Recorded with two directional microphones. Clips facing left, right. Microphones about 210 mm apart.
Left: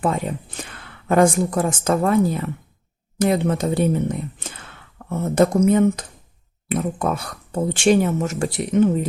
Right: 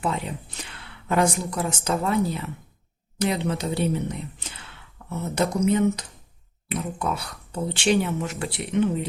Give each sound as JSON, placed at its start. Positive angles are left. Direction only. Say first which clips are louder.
{"t": 0.0, "sound": "speech", "louder": "left 5 dB", "side_deg": 50}